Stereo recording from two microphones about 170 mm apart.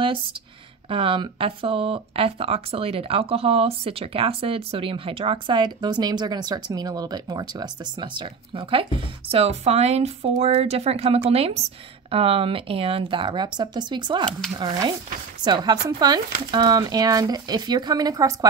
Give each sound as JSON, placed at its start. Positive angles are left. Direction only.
{"t": 0.0, "sound": "speech", "side_deg": -30}